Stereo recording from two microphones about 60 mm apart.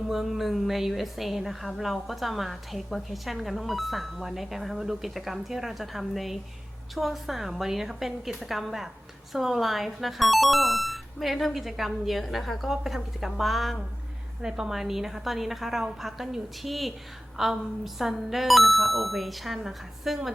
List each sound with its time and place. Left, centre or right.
0.1 s a woman's voice: centre